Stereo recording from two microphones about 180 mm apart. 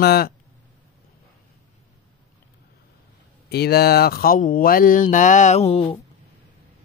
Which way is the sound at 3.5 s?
65° left (ahead or behind).